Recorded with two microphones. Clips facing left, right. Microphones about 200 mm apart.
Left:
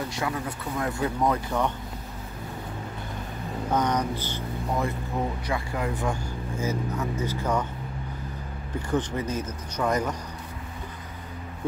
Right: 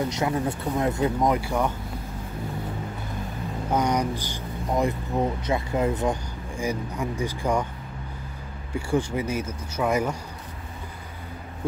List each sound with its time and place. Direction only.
0.1 s speech: 25° right (ahead or behind)
3.7 s speech: 10° right (ahead or behind)
8.7 s speech: 10° right (ahead or behind)